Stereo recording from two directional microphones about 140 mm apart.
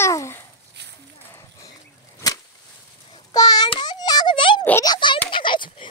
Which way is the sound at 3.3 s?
25° left (ahead or behind).